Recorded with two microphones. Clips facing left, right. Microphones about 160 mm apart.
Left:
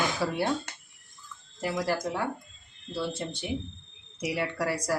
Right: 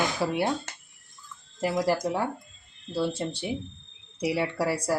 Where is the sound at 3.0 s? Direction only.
35° right (ahead or behind).